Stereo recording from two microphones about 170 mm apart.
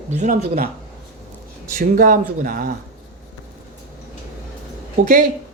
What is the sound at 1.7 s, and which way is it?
Speech, 55° right (ahead or behind).